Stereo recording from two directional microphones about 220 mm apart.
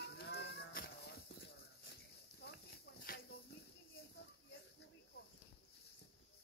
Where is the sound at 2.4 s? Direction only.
50° left (ahead or behind).